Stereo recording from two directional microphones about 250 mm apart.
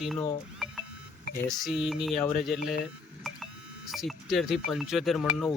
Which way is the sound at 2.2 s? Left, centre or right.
Left.